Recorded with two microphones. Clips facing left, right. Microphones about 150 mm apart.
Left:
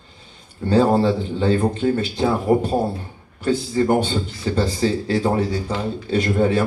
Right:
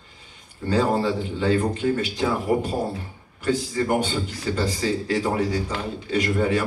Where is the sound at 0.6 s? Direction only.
35° left (ahead or behind).